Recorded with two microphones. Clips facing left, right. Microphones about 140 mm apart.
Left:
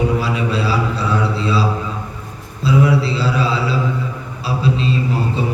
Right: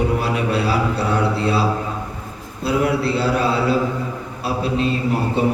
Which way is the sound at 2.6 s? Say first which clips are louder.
Left 3 dB; 55° right (ahead or behind).